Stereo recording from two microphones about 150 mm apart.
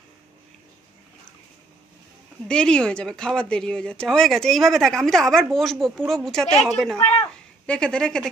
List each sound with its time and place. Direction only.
2.4 s speech: 5° left (ahead or behind)